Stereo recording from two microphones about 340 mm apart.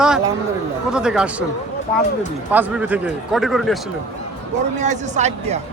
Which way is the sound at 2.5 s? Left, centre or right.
Centre.